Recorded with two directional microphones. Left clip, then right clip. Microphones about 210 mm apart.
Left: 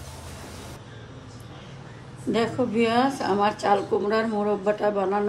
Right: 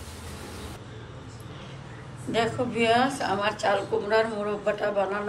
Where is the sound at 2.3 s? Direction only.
45° left (ahead or behind).